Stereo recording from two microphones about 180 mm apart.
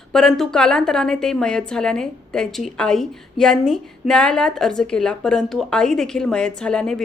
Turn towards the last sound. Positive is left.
turn(degrees=5)  # may be behind; listen again after turning